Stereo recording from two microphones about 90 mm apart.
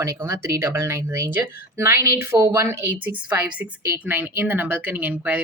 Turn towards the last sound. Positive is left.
turn(degrees=-20)  # may be behind; listen again after turning